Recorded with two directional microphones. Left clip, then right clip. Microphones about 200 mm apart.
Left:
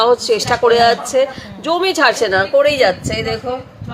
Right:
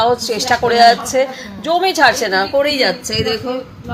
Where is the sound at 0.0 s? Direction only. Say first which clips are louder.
Left 2 dB; 15° left (ahead or behind).